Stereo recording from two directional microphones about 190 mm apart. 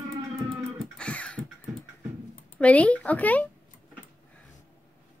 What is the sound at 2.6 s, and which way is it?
Speech, 5° left (ahead or behind).